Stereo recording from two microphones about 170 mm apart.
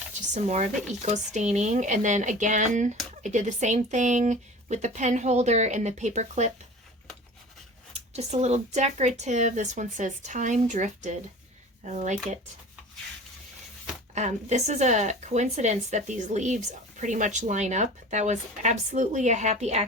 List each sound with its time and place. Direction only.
0.1 s a sound: 40° right (ahead or behind)
1.0 s speech: 45° right (ahead or behind)
7.9 s speech: 40° right (ahead or behind)
14.2 s speech: 45° right (ahead or behind)